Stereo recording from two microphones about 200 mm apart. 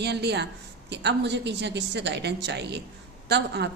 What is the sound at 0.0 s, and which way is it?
A woman's voice, 55° right (ahead or behind).